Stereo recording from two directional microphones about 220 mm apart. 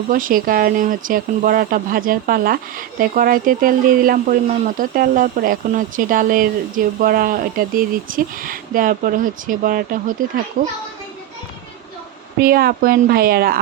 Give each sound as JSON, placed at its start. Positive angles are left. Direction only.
{"t": 0.1, "sound": "speech", "side_deg": -40}
{"t": 12.4, "sound": "speech", "side_deg": -45}